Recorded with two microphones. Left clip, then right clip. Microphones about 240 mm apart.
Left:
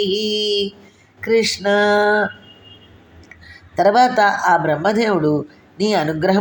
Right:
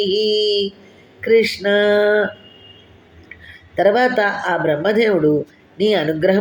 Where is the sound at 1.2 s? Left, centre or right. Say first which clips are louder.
Right 2 dB; left.